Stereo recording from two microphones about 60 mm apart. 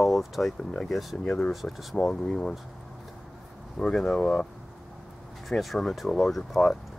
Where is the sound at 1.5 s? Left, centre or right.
Centre.